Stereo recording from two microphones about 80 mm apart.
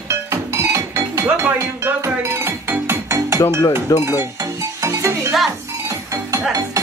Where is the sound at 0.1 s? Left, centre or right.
Right.